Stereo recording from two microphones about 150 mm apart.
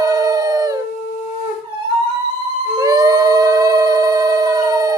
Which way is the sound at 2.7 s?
25° right (ahead or behind).